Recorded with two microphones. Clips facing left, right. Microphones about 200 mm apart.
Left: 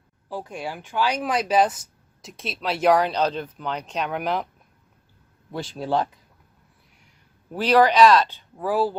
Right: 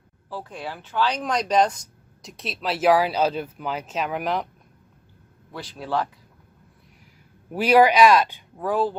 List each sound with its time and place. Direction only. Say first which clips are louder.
0.3 s speech: left 2 dB; 15° left (ahead or behind)
5.5 s speech: left 3 dB; 25° left (ahead or behind)
7.5 s speech: right 1 dB; 10° right (ahead or behind)
8.5 s speech: left 1 dB; 5° left (ahead or behind)